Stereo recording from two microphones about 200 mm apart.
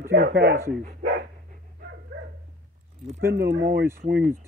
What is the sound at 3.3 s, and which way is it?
Speech, 50° right (ahead or behind).